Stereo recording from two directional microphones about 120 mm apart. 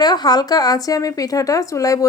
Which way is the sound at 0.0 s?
35° left (ahead or behind).